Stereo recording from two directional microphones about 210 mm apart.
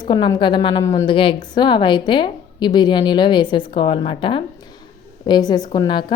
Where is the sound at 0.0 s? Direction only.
20° left (ahead or behind).